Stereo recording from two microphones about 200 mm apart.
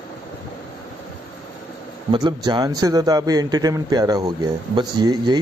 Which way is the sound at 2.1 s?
20° right (ahead or behind).